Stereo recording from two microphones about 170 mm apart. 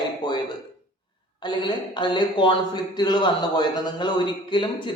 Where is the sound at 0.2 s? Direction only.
25° left (ahead or behind).